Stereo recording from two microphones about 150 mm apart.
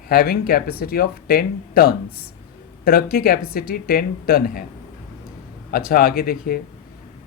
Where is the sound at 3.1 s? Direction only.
80° left.